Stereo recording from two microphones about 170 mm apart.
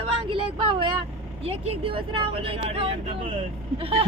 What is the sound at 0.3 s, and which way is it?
Speech, 30° right (ahead or behind).